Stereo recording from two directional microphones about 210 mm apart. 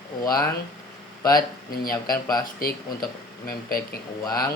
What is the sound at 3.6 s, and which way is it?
Speech, 45° left (ahead or behind).